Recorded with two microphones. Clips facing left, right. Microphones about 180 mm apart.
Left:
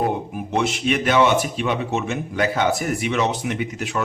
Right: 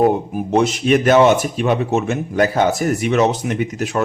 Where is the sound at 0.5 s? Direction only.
40° right (ahead or behind).